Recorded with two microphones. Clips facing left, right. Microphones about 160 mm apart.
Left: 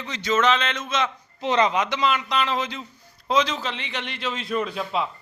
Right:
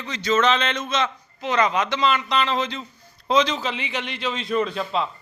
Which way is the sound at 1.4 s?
30° left (ahead or behind).